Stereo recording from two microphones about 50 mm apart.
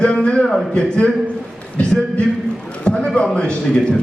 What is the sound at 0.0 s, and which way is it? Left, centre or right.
A man's voice, left.